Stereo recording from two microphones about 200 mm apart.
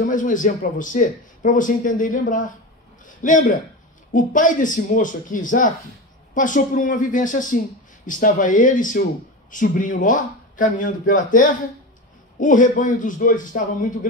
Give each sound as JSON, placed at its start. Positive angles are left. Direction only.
{"t": 0.0, "sound": "a man's voice", "side_deg": 40}